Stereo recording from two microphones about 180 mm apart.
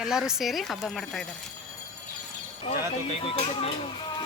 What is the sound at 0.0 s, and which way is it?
Speech, 5° right (ahead or behind).